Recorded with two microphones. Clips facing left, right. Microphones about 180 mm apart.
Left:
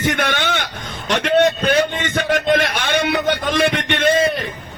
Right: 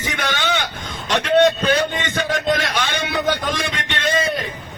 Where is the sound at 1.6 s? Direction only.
55° left (ahead or behind).